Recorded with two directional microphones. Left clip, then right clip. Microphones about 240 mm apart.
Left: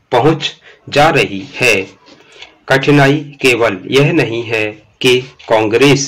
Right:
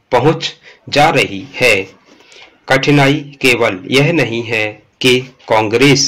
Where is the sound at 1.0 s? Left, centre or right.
Right.